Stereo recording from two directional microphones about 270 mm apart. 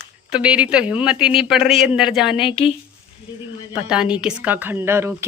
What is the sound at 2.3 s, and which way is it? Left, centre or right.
Speech, centre.